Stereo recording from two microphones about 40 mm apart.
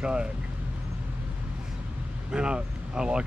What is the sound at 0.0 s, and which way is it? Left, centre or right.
Speech, right.